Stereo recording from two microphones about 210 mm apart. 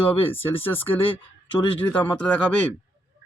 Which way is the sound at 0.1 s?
25° left (ahead or behind).